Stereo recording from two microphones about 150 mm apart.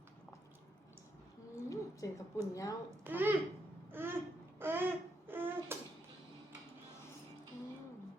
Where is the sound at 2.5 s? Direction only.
20° left (ahead or behind).